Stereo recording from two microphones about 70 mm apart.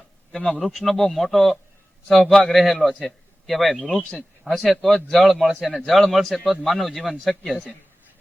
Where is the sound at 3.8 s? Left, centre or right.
Centre.